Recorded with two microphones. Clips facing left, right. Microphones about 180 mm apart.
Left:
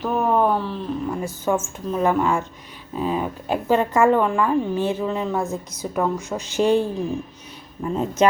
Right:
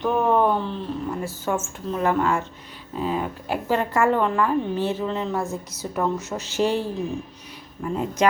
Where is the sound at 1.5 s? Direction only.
15° left (ahead or behind).